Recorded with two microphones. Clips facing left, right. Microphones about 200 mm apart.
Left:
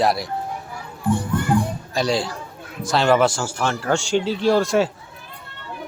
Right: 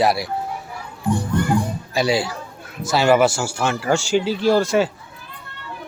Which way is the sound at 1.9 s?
5° right (ahead or behind).